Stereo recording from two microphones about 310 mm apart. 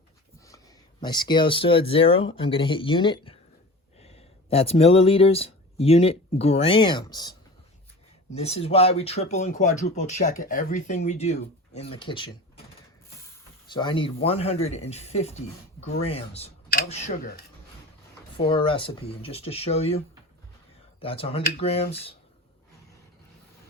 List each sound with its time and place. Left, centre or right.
1.0 s speech: centre
8.4 s speech: centre
13.7 s speech: centre
21.0 s speech: centre